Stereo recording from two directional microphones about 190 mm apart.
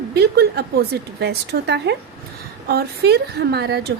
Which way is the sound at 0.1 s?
55° right (ahead or behind).